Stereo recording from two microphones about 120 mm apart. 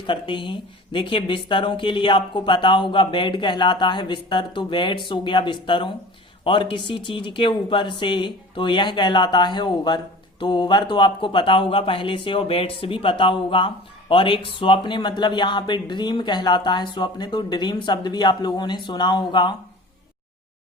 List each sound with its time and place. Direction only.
0.1 s speech: 40° left (ahead or behind)